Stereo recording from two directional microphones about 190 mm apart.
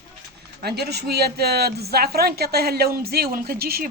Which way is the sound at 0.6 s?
55° right (ahead or behind).